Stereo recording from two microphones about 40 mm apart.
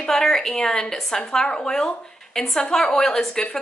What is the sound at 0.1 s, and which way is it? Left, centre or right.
A woman's voice, centre.